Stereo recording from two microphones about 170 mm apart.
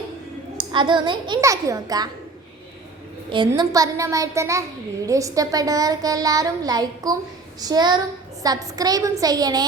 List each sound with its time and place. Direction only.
0.5 s a woman's voice: 30° right (ahead or behind)
3.2 s a woman's voice: 30° right (ahead or behind)